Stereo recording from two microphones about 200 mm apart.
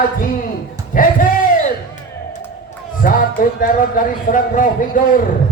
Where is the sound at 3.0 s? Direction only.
45° left (ahead or behind).